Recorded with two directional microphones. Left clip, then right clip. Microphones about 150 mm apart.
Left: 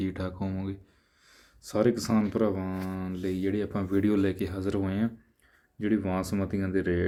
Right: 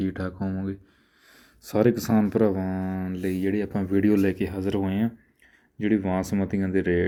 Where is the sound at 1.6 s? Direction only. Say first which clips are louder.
Right 4 dB; 25° right (ahead or behind).